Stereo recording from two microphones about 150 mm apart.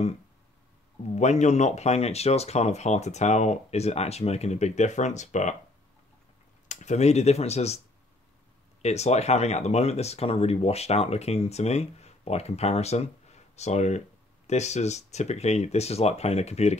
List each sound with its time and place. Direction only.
1.0 s speech: 50° left (ahead or behind)
6.7 s speech: 50° left (ahead or behind)
8.8 s speech: 45° left (ahead or behind)